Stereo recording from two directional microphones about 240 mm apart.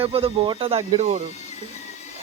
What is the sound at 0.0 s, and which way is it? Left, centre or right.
Speech, right.